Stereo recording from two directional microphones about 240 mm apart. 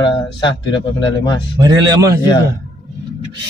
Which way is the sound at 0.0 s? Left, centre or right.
Centre.